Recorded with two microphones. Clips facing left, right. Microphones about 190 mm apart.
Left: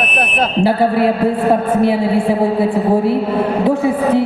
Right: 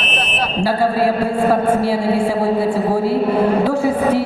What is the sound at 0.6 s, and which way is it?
A man's voice, 20° left (ahead or behind).